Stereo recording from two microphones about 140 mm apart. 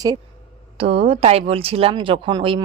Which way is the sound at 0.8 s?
45° right (ahead or behind).